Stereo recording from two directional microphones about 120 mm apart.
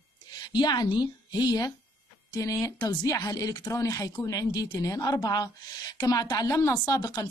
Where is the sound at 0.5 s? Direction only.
35° left (ahead or behind).